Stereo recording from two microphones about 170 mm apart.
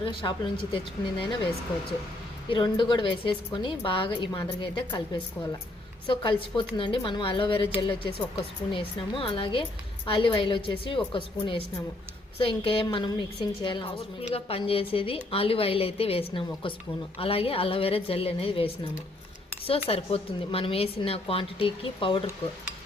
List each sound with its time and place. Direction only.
0.0 s a woman's voice: 30° left (ahead or behind)
2.5 s a woman's voice: 30° left (ahead or behind)
6.1 s a woman's voice: 30° left (ahead or behind)